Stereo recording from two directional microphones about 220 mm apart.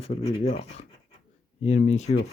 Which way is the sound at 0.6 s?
55° left (ahead or behind).